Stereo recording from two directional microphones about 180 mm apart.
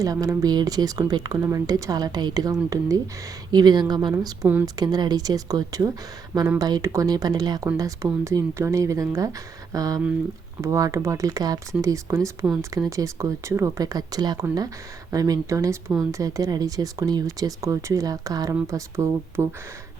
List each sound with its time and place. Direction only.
0.0 s speech: 20° right (ahead or behind)